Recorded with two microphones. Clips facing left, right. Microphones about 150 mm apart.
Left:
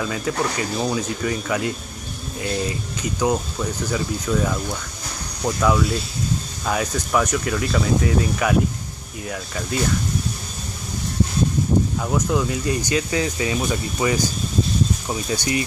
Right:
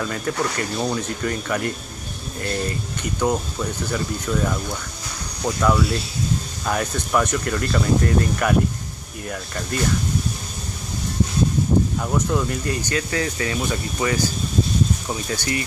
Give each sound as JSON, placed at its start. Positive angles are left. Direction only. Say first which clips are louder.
{"t": 0.0, "sound": "speech", "louder": "left 1 dB", "side_deg": 5}
{"t": 12.0, "sound": "speech", "louder": "left 1 dB", "side_deg": 5}
{"t": 12.8, "sound": "speech", "louder": "left 2 dB", "side_deg": 15}